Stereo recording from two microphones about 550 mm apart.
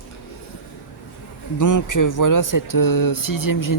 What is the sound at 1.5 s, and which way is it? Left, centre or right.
Speech, left.